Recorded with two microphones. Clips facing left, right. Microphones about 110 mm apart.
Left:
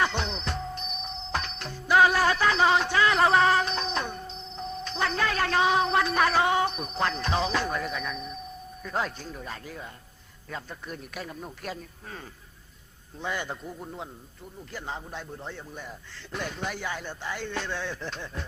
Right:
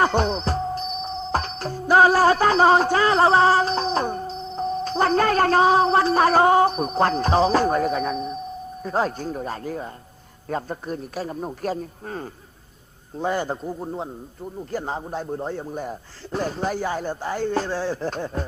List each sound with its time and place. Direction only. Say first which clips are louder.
0.0 s music: right 8 dB; 45° right (ahead or behind)
8.8 s a man's voice: right 7 dB; 35° right (ahead or behind)